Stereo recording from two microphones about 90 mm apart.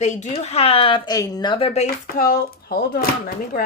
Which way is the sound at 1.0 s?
45° left (ahead or behind).